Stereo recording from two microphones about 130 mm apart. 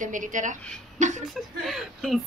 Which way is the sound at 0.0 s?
80° right.